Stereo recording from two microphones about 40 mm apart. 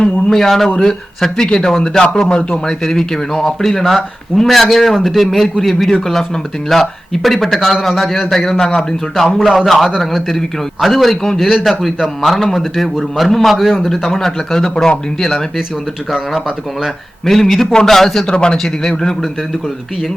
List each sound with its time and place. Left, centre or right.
0.3 s speech: centre; by 2.6 s left
2.6 s a man's voice: centre
13.8 s speech: centre
17.2 s speech: centre
18.3 s speech: left